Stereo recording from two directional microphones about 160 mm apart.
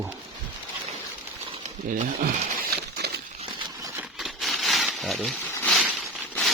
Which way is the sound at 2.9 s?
90° right.